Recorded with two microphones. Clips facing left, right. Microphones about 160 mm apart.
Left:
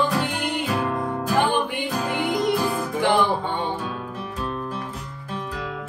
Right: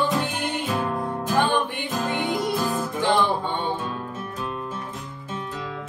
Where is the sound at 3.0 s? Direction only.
15° left (ahead or behind).